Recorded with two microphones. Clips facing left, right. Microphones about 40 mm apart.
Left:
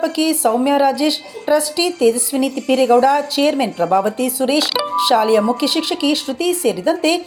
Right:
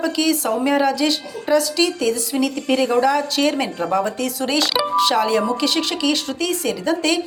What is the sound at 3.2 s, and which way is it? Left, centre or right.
Speech, centre.